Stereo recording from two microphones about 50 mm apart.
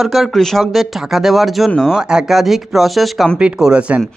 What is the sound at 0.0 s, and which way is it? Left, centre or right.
A man's voice, centre.